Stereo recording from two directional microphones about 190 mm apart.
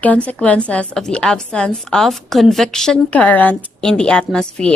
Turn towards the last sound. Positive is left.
turn(degrees=5)  # may be behind; listen again after turning